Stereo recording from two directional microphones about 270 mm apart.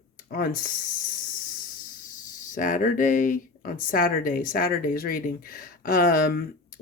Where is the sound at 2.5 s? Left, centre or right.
Left.